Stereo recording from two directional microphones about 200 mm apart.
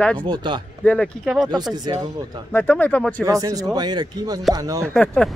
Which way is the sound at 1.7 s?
20° right (ahead or behind).